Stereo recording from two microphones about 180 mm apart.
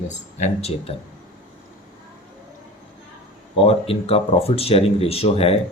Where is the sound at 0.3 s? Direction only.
40° left (ahead or behind).